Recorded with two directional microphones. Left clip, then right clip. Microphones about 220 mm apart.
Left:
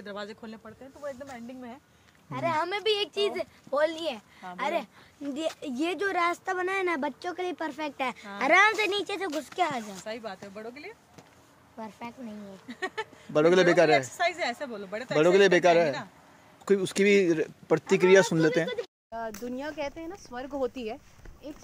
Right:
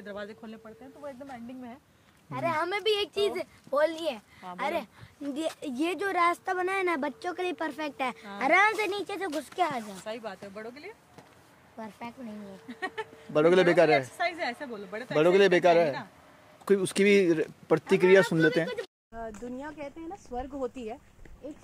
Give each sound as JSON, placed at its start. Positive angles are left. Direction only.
{"t": 0.0, "sound": "speech", "side_deg": 40}
{"t": 2.2, "sound": "speech", "side_deg": -5}
{"t": 10.0, "sound": "speech", "side_deg": -10}
{"t": 12.6, "sound": "speech", "side_deg": 35}
{"t": 13.3, "sound": "speech", "side_deg": 0}
{"t": 14.1, "sound": "a woman's voice", "side_deg": 45}
{"t": 15.1, "sound": "speech", "side_deg": 0}
{"t": 19.4, "sound": "speech", "side_deg": 15}